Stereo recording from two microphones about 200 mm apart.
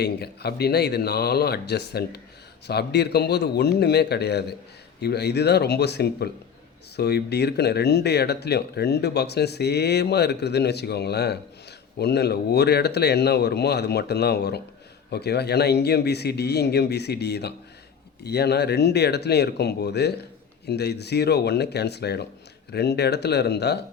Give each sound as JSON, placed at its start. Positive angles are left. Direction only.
{"t": 0.0, "sound": "speech", "side_deg": 55}